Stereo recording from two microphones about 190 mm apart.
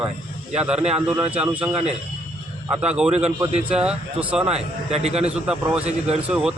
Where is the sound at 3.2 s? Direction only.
35° right (ahead or behind).